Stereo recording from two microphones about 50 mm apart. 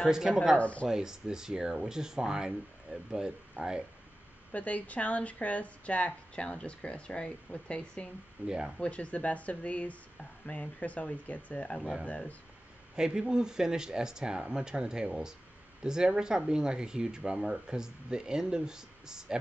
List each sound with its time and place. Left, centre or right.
0.1 s speech: centre
0.6 s a woman's voice: left
0.8 s speech: centre
4.5 s a woman's voice: left
8.5 s speech: centre
8.7 s a woman's voice: left
12.9 s speech: centre